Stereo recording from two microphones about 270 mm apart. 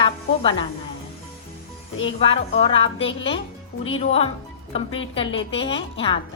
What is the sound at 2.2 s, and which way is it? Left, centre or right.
A woman's voice, left.